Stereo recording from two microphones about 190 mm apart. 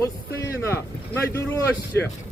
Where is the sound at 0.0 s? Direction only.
15° left (ahead or behind).